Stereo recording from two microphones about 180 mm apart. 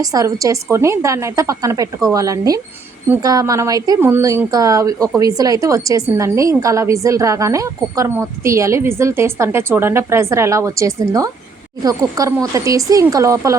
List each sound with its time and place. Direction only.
0.0 s a woman's voice: 20° right (ahead or behind)